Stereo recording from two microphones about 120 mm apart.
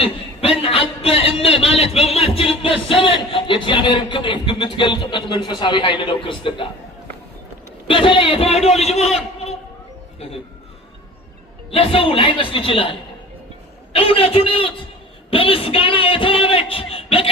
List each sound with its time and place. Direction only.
0.0 s a sound: 55° left (ahead or behind)
5.5 s a man's voice: 40° left (ahead or behind)
7.9 s a man's voice: 45° left (ahead or behind); by 9.0 s 60° left (ahead or behind)
9.1 s a sound: 60° left (ahead or behind)
10.2 s speech: 55° left (ahead or behind)
11.7 s a man's voice: 50° left (ahead or behind)